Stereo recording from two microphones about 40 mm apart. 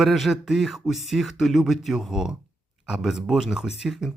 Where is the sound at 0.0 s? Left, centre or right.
Centre.